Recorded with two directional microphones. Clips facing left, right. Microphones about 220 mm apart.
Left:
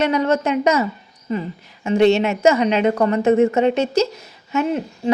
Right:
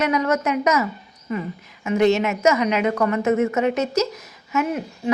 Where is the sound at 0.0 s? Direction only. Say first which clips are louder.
Left 3 dB; 30° left (ahead or behind).